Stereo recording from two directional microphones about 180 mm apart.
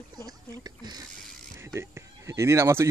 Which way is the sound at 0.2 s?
20° right (ahead or behind).